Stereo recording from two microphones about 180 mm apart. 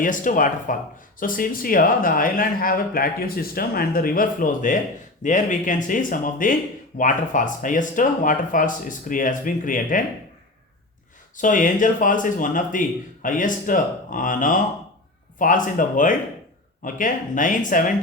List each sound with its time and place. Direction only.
0.0 s speech: 50° left (ahead or behind)
11.3 s speech: 45° left (ahead or behind)